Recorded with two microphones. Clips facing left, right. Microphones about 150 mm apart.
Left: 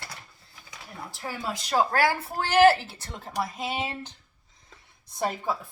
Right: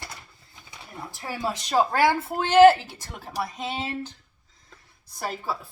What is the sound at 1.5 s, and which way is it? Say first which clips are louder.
Speech: right 2 dB; 20° right (ahead or behind).